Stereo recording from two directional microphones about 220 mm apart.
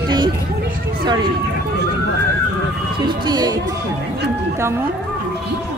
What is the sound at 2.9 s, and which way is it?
Speech, 20° right (ahead or behind).